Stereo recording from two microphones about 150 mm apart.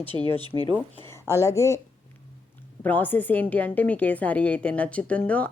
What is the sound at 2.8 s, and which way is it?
A woman's voice, 10° left (ahead or behind).